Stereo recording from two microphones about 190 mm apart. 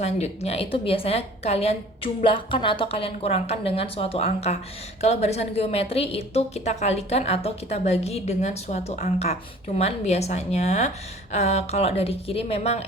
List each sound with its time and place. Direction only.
0.0 s a woman's voice: 35° left (ahead or behind)